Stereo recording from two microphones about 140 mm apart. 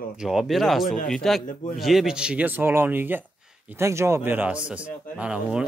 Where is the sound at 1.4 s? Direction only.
65° left (ahead or behind).